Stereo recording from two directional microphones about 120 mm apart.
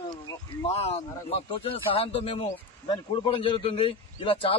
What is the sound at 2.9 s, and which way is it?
A man's voice, 40° left (ahead or behind).